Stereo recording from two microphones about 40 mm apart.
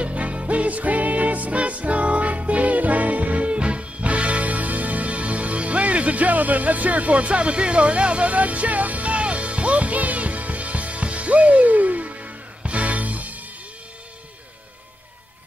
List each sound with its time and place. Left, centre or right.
0.0 s music: right